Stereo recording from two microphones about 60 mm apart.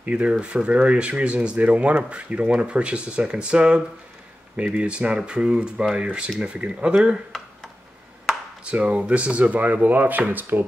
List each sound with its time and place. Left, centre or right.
0.0 s speech: right
8.6 s speech: centre